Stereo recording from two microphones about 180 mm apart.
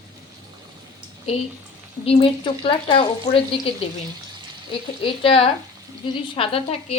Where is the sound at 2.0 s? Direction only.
30° left (ahead or behind).